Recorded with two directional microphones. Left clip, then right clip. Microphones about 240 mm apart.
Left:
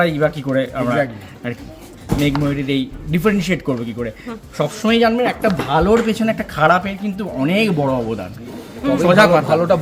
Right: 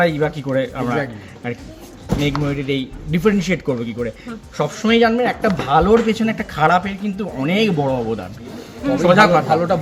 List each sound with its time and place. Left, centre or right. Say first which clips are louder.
0.0 s speech: left 1 dB; centre
9.5 s a man's voice: left 2 dB; centre